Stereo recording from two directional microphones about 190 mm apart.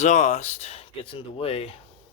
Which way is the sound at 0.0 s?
35° left (ahead or behind).